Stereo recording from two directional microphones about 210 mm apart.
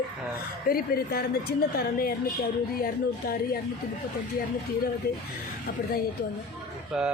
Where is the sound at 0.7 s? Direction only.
40° left (ahead or behind).